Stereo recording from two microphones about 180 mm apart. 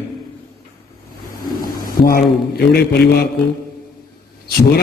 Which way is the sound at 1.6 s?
55° left (ahead or behind).